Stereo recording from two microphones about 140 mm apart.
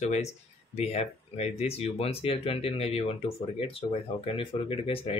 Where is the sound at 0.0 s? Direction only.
50° left (ahead or behind).